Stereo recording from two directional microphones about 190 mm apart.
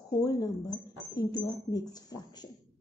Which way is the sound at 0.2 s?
20° left (ahead or behind).